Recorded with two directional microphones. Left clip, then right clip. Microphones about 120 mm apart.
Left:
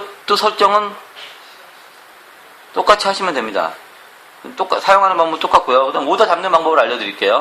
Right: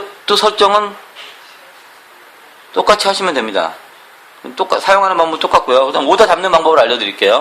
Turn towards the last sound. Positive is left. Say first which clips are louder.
# right 4 dB
turn(degrees=-35)  # may be behind; listen again after turning